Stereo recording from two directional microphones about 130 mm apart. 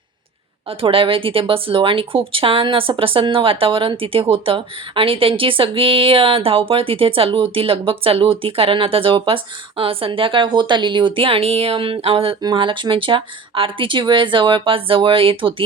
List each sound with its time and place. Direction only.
0.7 s speech: 45° right (ahead or behind)